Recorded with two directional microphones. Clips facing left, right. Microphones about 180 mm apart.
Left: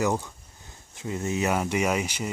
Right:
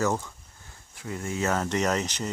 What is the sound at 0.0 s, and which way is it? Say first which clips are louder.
Speech: left 1 dB; 15° left (ahead or behind).